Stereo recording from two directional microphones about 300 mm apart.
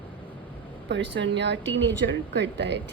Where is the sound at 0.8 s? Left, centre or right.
Right.